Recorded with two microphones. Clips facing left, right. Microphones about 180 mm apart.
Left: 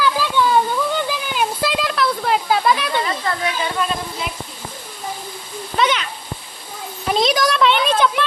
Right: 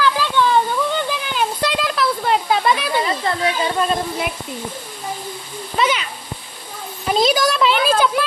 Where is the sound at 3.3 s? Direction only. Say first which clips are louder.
Right 2 dB; 30° right (ahead or behind).